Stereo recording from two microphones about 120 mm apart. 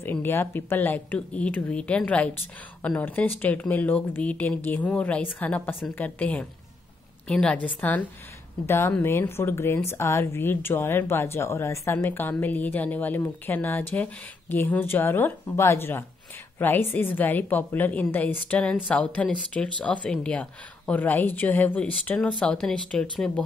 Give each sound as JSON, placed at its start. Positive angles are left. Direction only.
{"t": 0.0, "sound": "speech", "side_deg": 20}